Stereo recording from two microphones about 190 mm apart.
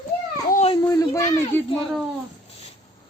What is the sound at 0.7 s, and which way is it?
Speech, 20° left (ahead or behind).